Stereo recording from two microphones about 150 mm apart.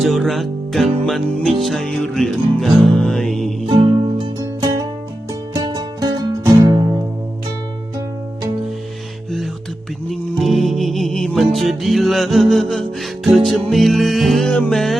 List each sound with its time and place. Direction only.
0.0 s music: centre (ahead or behind)
3.7 s music: 35° right (ahead or behind)
10.5 s music: centre (ahead or behind)